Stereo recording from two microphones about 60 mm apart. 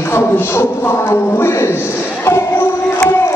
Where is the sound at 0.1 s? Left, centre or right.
Left.